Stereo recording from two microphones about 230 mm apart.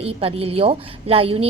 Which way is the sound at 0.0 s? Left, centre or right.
Right.